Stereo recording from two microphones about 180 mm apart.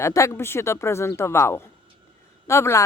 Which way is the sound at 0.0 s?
15° left (ahead or behind).